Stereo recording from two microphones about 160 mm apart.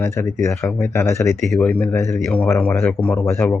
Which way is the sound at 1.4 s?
5° left (ahead or behind).